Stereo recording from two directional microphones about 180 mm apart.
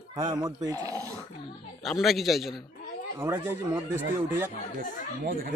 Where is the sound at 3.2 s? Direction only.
10° right (ahead or behind).